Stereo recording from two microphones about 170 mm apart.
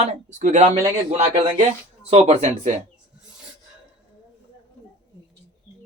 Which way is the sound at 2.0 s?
40° right (ahead or behind).